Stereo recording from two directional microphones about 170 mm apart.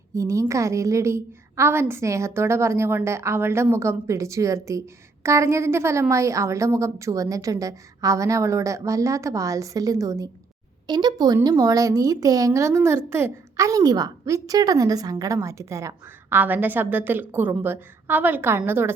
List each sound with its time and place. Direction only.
0.1 s a woman's voice: 20° right (ahead or behind)